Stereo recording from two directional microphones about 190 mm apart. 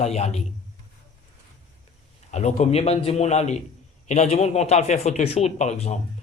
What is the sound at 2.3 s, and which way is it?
A man's voice, 35° left (ahead or behind).